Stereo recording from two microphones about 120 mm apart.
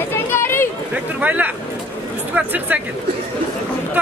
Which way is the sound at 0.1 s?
20° left (ahead or behind).